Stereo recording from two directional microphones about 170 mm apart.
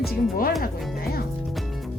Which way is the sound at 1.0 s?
65° left (ahead or behind).